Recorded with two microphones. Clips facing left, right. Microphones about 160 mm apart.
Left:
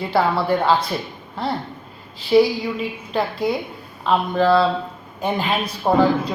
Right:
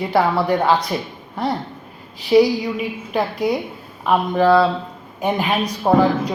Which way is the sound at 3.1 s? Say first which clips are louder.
Right 2 dB; 15° right (ahead or behind).